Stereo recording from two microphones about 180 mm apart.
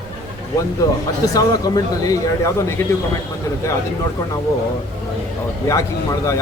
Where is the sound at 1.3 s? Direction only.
20° left (ahead or behind).